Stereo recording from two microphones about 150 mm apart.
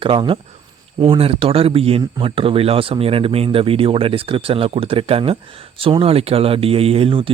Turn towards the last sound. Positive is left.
turn(degrees=-35)  # may be behind; listen again after turning